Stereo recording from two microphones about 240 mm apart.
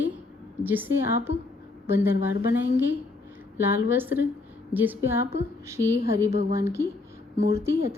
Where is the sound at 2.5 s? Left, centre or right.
Centre.